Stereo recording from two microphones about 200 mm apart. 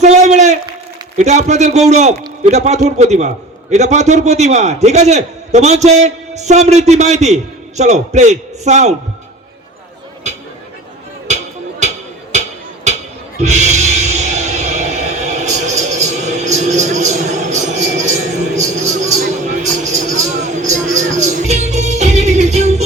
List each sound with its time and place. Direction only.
0.0 s a sound: 35° right (ahead or behind)
1.2 s a man's voice: 35° right (ahead or behind)
13.4 s music: 35° right (ahead or behind)